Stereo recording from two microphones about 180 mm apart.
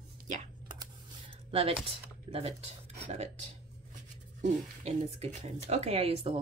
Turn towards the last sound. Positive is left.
turn(degrees=-30)  # may be behind; listen again after turning